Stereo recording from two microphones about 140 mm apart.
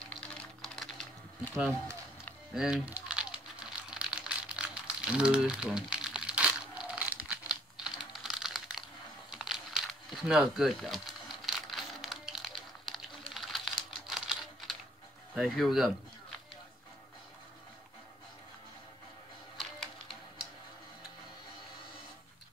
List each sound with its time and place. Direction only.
0.2 s typing: 5° left (ahead or behind)
2.5 s music: 5° right (ahead or behind)
3.9 s crumpling: 5° right (ahead or behind)
8.1 s typing: centre (ahead or behind)
9.3 s crumpling: 5° right (ahead or behind)
14.0 s typing: 5° right (ahead or behind)
15.3 s speech: centre (ahead or behind)
19.5 s music: centre (ahead or behind)